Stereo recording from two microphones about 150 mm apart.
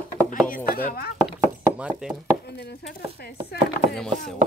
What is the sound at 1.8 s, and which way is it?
Speech, 10° right (ahead or behind).